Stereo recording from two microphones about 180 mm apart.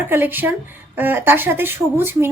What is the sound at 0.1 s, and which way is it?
A woman's voice, 10° right (ahead or behind).